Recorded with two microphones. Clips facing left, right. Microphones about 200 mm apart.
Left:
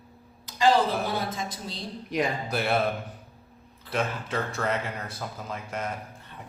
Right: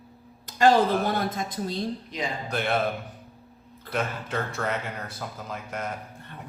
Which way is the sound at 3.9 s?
Centre (ahead or behind).